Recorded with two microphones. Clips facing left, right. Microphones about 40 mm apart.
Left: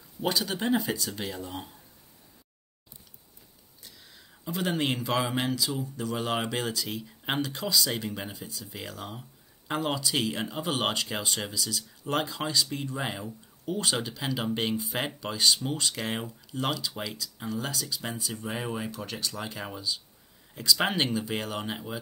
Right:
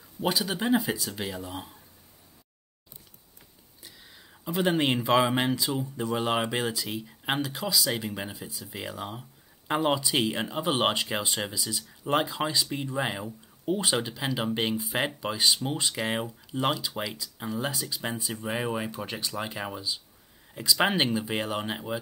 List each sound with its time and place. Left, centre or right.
0.2 s speech: centre
3.8 s speech: centre